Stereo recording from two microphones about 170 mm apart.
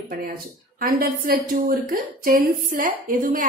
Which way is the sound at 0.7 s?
60° right (ahead or behind).